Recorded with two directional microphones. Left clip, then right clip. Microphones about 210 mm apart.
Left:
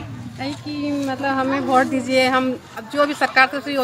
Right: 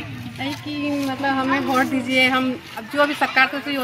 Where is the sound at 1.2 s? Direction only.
10° left (ahead or behind).